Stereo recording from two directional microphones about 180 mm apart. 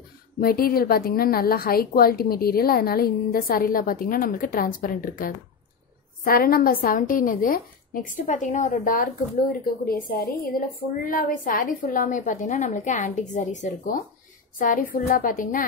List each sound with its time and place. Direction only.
0.4 s a woman's voice: 55° left (ahead or behind)